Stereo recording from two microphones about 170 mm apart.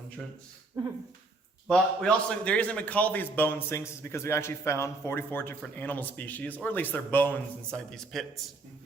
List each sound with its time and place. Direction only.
0.8 s speech: 25° right (ahead or behind)
1.7 s a man's voice: 5° left (ahead or behind)